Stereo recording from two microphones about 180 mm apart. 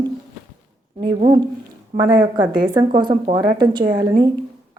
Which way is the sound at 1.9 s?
20° right (ahead or behind).